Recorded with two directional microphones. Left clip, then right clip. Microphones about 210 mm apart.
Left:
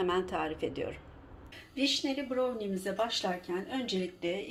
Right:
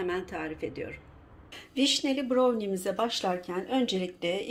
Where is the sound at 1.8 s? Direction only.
45° right (ahead or behind).